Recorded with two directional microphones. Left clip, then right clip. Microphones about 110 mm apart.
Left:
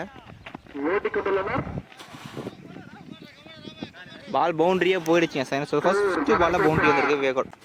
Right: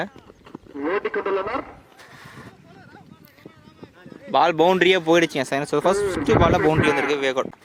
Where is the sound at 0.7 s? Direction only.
30° right (ahead or behind).